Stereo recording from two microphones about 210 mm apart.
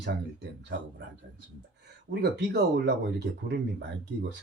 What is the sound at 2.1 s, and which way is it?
Speech, 55° right (ahead or behind).